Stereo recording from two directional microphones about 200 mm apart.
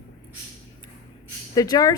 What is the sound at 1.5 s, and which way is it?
Speech, 15° left (ahead or behind).